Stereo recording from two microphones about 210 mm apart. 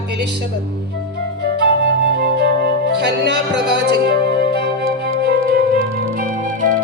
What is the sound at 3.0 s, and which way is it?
Speech, 55° right (ahead or behind).